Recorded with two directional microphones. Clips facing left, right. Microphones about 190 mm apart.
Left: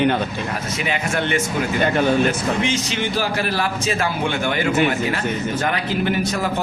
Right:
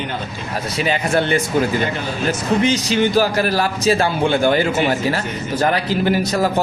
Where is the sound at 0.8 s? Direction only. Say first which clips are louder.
Right 5 dB; 35° right (ahead or behind).